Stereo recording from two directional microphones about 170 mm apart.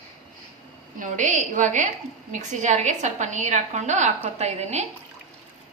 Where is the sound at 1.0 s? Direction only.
50° right (ahead or behind).